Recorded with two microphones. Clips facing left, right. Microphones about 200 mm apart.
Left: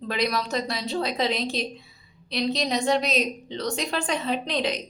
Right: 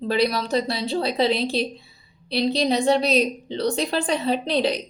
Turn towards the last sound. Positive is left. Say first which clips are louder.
# right 5 dB
turn(degrees=-35)  # may be behind; listen again after turning